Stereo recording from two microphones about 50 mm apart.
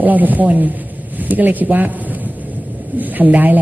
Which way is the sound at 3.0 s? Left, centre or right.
Right.